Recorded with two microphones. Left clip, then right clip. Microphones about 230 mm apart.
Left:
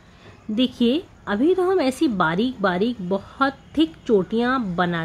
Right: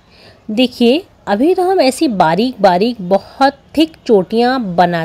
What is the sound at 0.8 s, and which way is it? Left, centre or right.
A woman's voice, right.